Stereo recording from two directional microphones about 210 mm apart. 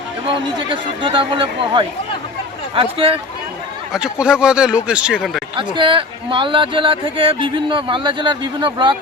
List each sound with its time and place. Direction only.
0.7 s speech: 25° right (ahead or behind)
3.9 s speech: 5° right (ahead or behind)
5.5 s speech: 25° right (ahead or behind)